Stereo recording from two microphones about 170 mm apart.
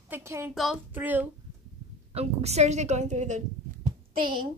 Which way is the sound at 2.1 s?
40° right (ahead or behind).